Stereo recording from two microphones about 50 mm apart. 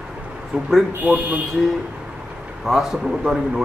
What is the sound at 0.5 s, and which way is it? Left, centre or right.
Speech, centre.